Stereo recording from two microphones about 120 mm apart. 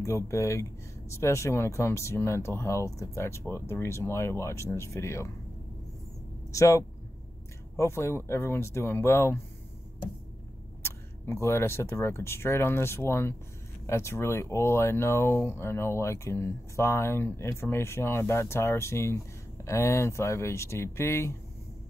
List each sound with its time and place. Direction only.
0.0 s speech: 25° left (ahead or behind)
6.5 s speech: 25° left (ahead or behind)
10.8 s speech: 20° left (ahead or behind)